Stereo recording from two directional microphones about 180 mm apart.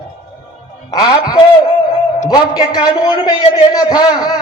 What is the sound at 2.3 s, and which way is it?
A man's voice, 20° left (ahead or behind).